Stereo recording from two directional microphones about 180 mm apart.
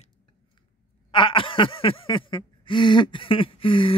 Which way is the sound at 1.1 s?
30° left (ahead or behind).